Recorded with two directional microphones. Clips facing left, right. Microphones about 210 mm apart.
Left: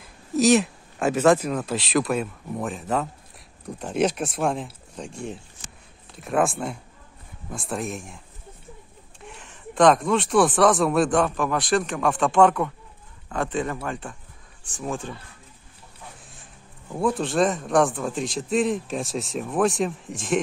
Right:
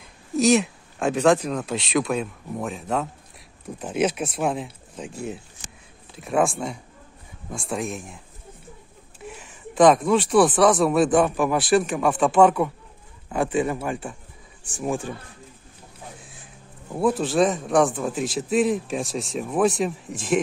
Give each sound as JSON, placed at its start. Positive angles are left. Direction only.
{"t": 0.0, "sound": "speech", "side_deg": 0}
{"t": 9.2, "sound": "speech", "side_deg": -5}
{"t": 16.9, "sound": "speech", "side_deg": -5}